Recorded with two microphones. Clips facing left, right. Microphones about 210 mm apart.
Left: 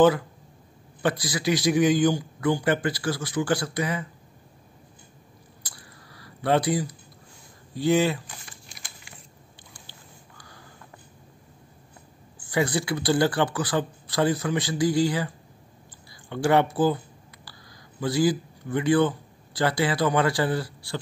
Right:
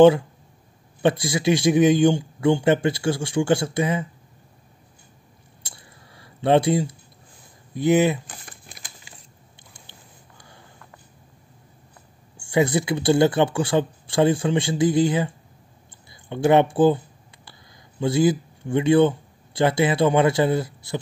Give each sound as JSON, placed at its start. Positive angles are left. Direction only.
{"t": 1.0, "sound": "a man's voice", "side_deg": -25}
{"t": 5.6, "sound": "a sound", "side_deg": -25}
{"t": 7.7, "sound": "a man's voice", "side_deg": -20}
{"t": 10.3, "sound": "a sound", "side_deg": -25}
{"t": 12.4, "sound": "a man's voice", "side_deg": -25}
{"t": 18.0, "sound": "speech", "side_deg": -25}